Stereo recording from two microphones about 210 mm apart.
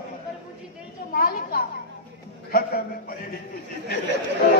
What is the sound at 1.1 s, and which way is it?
A man's voice, 45° left (ahead or behind).